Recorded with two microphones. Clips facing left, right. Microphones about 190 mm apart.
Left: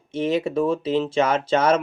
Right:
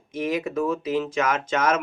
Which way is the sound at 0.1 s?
30° left (ahead or behind).